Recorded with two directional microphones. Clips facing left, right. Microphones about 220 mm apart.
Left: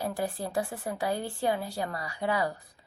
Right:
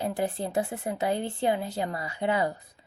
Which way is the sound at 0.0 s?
20° right (ahead or behind).